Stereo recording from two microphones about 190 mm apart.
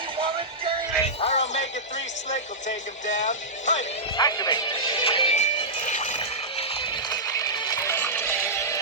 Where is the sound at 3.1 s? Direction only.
40° left (ahead or behind).